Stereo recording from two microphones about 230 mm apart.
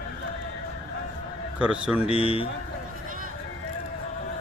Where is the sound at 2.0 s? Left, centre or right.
Left.